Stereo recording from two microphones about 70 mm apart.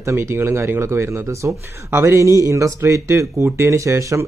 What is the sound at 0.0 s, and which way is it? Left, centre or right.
A man's voice, right.